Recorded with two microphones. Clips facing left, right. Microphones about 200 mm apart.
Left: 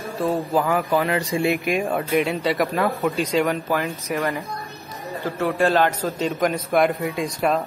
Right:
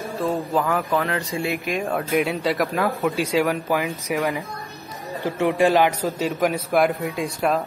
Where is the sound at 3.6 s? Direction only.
15° right (ahead or behind).